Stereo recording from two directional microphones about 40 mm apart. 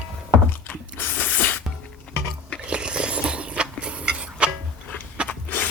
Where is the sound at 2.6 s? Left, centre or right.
Right.